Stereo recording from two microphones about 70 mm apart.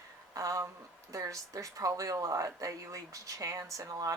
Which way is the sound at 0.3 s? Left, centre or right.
Right.